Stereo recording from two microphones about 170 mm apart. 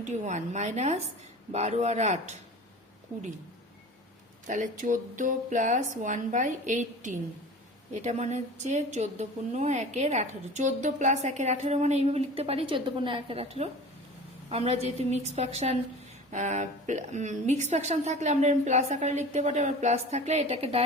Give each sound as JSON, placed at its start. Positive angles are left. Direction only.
{"t": 0.0, "sound": "a woman's voice", "side_deg": -45}
{"t": 4.4, "sound": "a woman's voice", "side_deg": -50}